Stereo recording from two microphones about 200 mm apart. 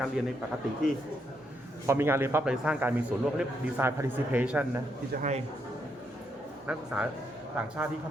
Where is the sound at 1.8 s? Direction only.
10° right (ahead or behind).